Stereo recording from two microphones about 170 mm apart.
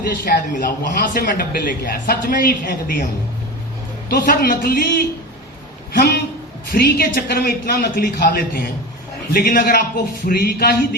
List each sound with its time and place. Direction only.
0.1 s speech: 50° left (ahead or behind)
4.1 s speech: 60° left (ahead or behind)